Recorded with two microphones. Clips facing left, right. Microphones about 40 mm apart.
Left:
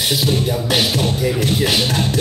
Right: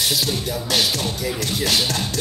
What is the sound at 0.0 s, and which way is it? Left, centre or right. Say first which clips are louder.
Music: left 4 dB; left.